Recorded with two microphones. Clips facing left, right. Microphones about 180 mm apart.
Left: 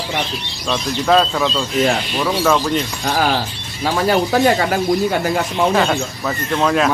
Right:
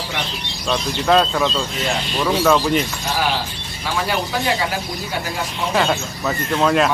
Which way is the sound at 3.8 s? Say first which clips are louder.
Left 6 dB; 45° left (ahead or behind).